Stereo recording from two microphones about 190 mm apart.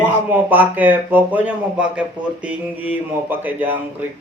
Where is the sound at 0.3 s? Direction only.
10° right (ahead or behind).